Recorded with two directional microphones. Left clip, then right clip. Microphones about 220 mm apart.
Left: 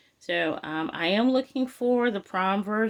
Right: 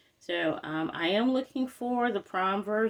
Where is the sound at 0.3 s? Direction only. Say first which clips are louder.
Left 3 dB; 30° left (ahead or behind).